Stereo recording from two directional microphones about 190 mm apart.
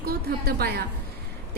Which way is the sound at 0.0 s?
55° right (ahead or behind).